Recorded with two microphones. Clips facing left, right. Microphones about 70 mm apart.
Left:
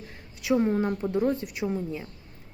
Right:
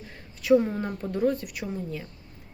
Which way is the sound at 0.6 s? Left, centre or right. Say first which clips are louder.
Left 5 dB; centre.